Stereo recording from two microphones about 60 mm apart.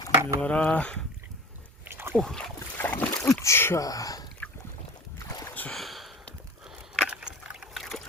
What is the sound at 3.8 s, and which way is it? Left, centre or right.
Speech, left.